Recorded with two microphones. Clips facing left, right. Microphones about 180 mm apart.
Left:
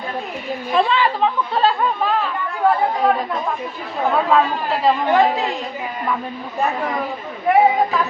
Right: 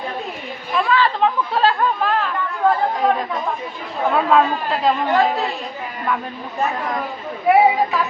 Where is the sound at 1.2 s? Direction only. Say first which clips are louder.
Even; centre (ahead or behind).